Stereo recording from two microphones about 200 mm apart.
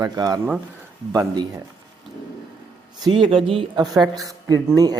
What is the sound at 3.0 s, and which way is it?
Speech, 25° right (ahead or behind).